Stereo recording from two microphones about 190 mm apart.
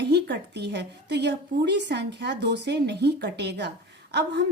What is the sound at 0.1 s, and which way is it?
A woman's voice, 60° right (ahead or behind).